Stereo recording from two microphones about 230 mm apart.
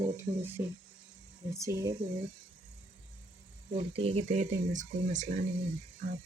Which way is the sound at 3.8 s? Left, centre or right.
Right.